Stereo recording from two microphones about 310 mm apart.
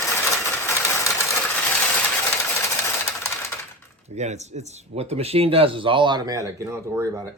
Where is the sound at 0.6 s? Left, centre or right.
Centre.